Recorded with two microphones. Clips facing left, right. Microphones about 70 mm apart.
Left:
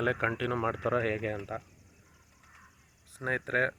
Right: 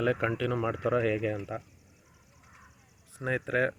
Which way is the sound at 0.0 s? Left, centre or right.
Left.